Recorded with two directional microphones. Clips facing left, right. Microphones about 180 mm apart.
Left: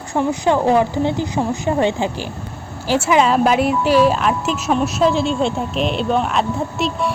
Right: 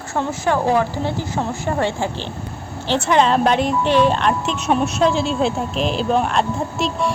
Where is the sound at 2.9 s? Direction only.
5° left (ahead or behind).